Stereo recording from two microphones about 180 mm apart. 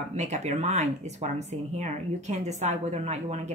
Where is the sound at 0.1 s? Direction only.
40° right (ahead or behind).